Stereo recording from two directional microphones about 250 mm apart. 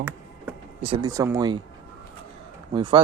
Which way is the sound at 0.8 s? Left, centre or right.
Centre.